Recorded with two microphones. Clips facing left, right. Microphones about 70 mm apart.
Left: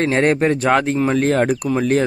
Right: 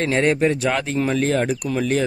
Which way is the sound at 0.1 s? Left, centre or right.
Left.